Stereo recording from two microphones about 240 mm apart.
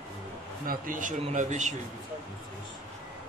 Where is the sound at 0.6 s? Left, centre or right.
Right.